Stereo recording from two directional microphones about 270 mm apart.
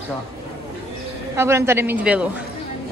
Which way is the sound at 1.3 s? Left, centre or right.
Centre.